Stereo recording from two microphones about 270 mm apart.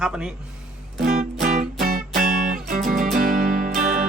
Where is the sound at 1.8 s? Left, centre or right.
Right.